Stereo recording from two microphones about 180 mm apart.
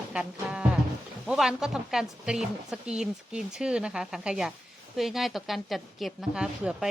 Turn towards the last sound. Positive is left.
turn(degrees=-5)  # may be behind; listen again after turning